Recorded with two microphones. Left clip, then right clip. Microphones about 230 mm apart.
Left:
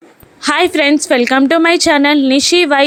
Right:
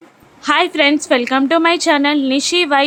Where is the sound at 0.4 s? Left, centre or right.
Centre.